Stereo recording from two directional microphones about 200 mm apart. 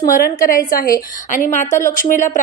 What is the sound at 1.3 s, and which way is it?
A woman's voice, 40° left (ahead or behind).